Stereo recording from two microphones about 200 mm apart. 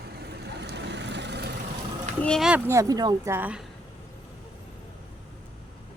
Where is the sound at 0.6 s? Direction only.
60° right (ahead or behind).